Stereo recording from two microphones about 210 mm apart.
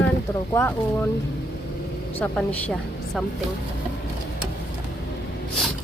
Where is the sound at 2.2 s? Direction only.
5° left (ahead or behind).